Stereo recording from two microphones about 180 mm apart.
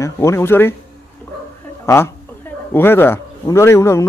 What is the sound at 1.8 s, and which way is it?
Speech, 15° left (ahead or behind).